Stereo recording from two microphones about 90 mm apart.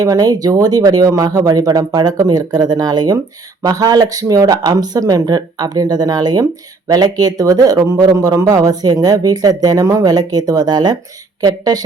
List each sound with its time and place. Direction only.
0.0 s a woman's voice: 45° right (ahead or behind)